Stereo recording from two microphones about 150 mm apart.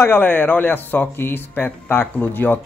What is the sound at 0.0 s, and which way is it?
Speech, 15° left (ahead or behind).